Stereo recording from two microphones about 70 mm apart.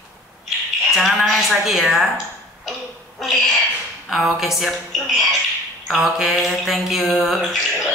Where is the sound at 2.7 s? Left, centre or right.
Centre.